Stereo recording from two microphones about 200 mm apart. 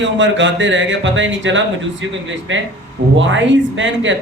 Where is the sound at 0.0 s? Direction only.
65° right (ahead or behind).